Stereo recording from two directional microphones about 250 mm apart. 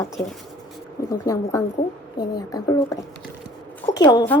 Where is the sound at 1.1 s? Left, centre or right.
Centre.